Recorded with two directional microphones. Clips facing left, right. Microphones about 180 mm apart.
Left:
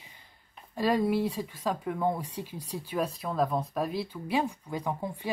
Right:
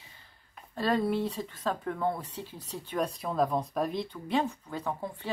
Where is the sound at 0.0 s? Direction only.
15° left (ahead or behind).